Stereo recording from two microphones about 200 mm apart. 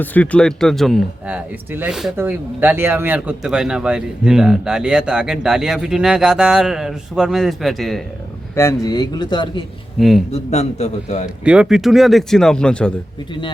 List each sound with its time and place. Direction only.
0.0 s speech: 10° left (ahead or behind)
8.5 s speech: 15° left (ahead or behind)
10.0 s speech: centre (ahead or behind)
10.3 s a man's voice: 35° left (ahead or behind)
11.4 s speech: 5° right (ahead or behind)